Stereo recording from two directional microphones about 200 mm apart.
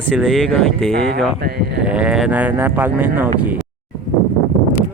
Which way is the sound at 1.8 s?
5° right (ahead or behind).